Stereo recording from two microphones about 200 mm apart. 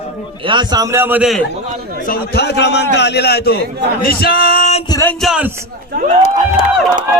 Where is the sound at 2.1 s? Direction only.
55° left (ahead or behind); by 4.8 s 40° left (ahead or behind).